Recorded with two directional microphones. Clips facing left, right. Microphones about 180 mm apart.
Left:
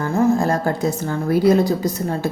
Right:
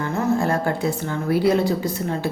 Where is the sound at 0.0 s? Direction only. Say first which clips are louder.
Left 4 dB; 40° left (ahead or behind).